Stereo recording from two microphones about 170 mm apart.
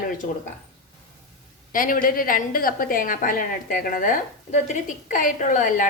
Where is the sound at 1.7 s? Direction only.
55° left (ahead or behind).